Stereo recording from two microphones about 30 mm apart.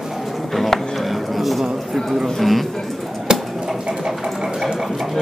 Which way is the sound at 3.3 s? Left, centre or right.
Right.